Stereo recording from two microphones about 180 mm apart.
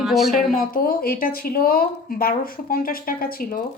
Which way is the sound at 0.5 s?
55° left (ahead or behind).